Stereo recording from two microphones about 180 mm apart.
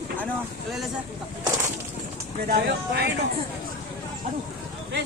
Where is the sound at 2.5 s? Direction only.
60° right (ahead or behind).